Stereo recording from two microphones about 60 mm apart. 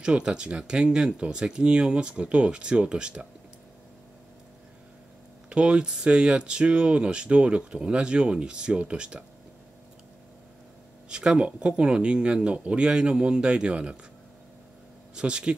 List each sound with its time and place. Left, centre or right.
0.0 s speech: centre
5.5 s speech: centre
11.1 s speech: centre
15.1 s speech: centre